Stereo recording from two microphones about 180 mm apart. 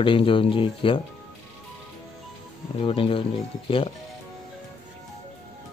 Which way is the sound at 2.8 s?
30° left (ahead or behind).